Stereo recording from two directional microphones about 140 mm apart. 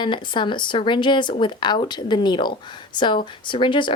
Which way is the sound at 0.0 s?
35° left (ahead or behind).